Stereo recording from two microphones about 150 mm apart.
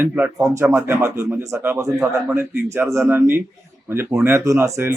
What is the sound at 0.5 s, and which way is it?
Speech, 20° right (ahead or behind).